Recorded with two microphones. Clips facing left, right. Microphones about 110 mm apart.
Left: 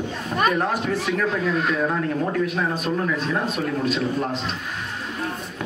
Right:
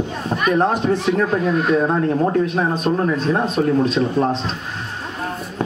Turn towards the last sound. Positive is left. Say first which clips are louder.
# right 5 dB
turn(degrees=-30)  # may be behind; listen again after turning